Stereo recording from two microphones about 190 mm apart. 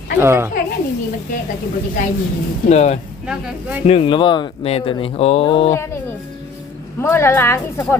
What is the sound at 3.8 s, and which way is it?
Speech, 30° left (ahead or behind).